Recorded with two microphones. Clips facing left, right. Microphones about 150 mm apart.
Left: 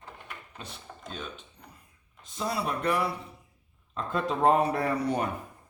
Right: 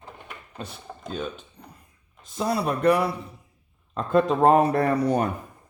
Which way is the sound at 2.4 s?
45° right (ahead or behind).